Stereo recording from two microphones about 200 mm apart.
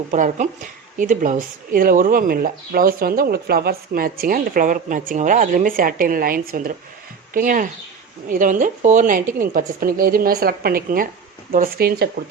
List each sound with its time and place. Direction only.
0.1 s speech: 40° right (ahead or behind)